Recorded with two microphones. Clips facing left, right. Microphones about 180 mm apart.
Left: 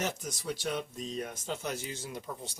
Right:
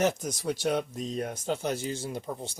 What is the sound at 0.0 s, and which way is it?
Speech, 50° right (ahead or behind).